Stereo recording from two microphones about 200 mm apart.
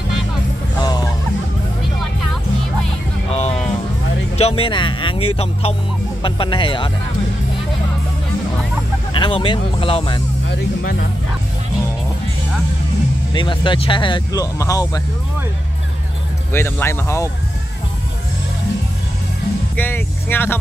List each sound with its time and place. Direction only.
0.7 s music: 20° left (ahead or behind)
4.4 s speech: 30° left (ahead or behind)
9.1 s speech: 25° left (ahead or behind)
10.5 s speech: 55° left (ahead or behind)
13.3 s speech: 25° left (ahead or behind)
16.5 s speech: 10° left (ahead or behind)
19.8 s music: 10° left (ahead or behind)